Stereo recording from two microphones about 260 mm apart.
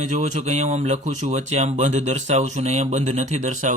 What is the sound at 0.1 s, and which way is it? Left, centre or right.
Speech, right.